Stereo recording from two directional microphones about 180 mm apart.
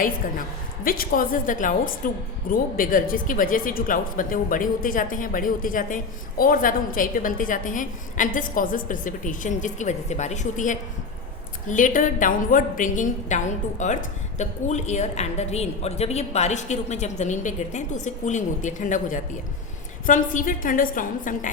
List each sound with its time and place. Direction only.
0.9 s a woman's voice: 50° left (ahead or behind)